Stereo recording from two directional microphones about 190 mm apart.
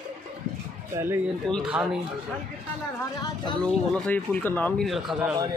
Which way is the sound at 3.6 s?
5° left (ahead or behind).